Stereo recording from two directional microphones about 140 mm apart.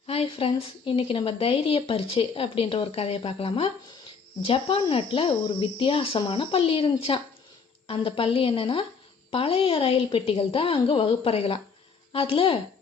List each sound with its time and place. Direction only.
0.1 s speech: 45° left (ahead or behind)